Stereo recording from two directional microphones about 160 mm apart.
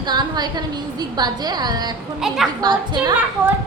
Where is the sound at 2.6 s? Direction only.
25° right (ahead or behind).